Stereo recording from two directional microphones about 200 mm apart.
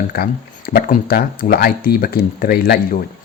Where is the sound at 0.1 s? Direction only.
50° left (ahead or behind).